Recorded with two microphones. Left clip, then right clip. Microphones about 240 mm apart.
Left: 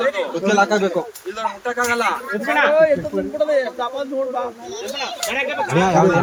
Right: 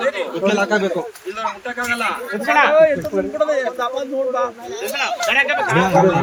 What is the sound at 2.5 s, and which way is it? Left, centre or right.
Speech, centre.